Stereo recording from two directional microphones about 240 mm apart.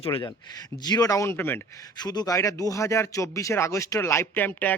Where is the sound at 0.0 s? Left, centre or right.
Left.